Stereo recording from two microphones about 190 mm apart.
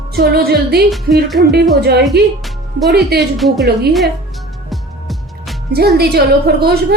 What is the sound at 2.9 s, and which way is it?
Speech, 60° right (ahead or behind).